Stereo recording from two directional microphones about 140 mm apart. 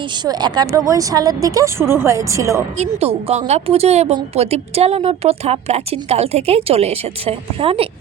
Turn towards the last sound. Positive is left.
turn(degrees=-40)  # may be behind; listen again after turning